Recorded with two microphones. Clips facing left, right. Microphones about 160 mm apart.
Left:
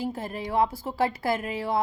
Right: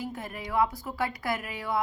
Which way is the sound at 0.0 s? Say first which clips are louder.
Left 5 dB; 30° left (ahead or behind).